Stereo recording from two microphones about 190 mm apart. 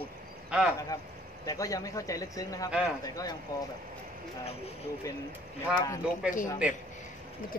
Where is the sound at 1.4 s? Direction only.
20° left (ahead or behind).